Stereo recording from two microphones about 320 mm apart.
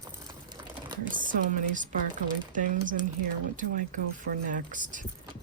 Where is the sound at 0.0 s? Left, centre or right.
Centre.